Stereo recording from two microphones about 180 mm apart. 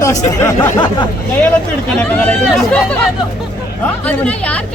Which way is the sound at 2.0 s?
10° left (ahead or behind).